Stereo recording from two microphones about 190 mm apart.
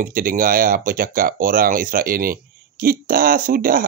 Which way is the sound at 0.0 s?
50° right (ahead or behind).